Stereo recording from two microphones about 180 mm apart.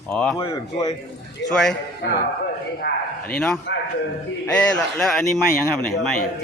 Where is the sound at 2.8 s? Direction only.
60° left (ahead or behind).